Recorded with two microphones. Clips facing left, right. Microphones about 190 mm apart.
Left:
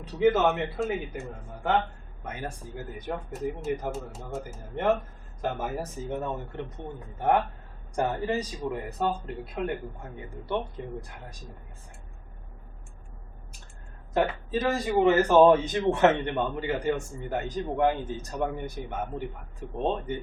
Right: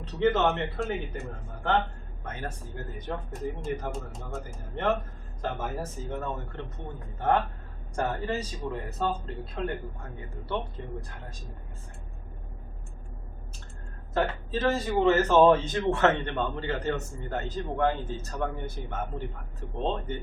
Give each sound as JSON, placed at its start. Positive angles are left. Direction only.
{"t": 0.0, "sound": "a man's voice", "side_deg": 10}
{"t": 2.2, "sound": "a man's voice", "side_deg": 10}
{"t": 14.1, "sound": "a man's voice", "side_deg": 15}